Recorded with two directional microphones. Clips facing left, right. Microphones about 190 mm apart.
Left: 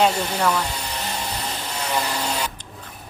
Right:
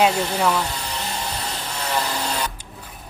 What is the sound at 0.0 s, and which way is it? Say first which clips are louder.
Speech: right 1 dB; 5° right (ahead or behind).